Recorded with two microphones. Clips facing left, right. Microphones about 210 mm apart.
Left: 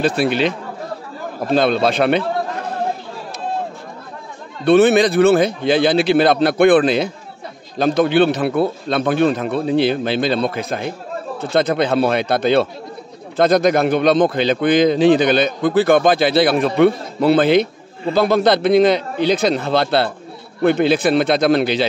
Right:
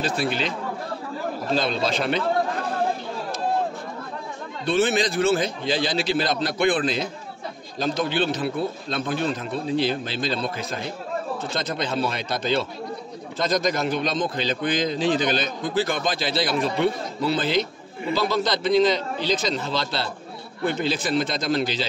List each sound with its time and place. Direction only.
0.0 s a man's voice: 65° left (ahead or behind)
4.6 s a man's voice: 60° left (ahead or behind)